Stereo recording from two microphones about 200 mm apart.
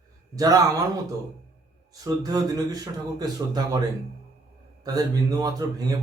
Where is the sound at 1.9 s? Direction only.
20° right (ahead or behind).